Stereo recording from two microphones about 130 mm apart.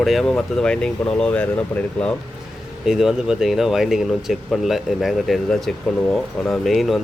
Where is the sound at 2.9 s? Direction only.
5° right (ahead or behind).